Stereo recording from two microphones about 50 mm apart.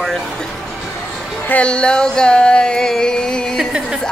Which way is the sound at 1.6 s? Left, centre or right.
Left.